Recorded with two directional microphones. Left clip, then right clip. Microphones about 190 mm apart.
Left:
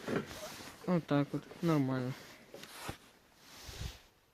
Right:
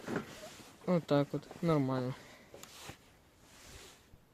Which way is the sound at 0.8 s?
10° right (ahead or behind).